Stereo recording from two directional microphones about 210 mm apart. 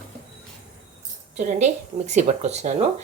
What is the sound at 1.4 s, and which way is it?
Speech, 35° right (ahead or behind).